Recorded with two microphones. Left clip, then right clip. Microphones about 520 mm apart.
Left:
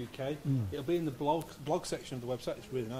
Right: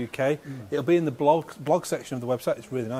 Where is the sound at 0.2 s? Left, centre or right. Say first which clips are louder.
Right 11 dB; right.